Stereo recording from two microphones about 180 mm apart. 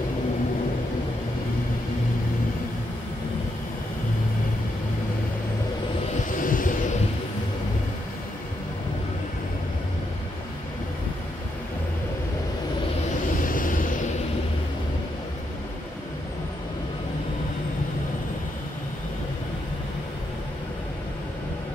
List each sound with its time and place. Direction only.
6.3 s vehicle: 50° left (ahead or behind)
13.4 s vehicle: 50° left (ahead or behind)